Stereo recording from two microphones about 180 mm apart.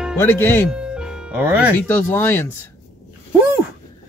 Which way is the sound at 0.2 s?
10° left (ahead or behind).